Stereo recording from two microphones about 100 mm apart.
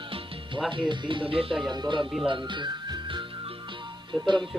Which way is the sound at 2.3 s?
50° right (ahead or behind).